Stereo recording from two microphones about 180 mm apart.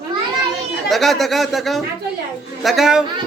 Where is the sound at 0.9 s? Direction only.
Centre (ahead or behind).